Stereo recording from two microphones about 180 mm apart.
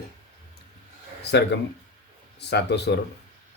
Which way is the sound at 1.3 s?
70° left (ahead or behind).